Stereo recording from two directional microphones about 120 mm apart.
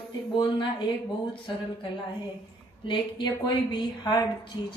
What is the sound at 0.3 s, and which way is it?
Speech, 40° left (ahead or behind).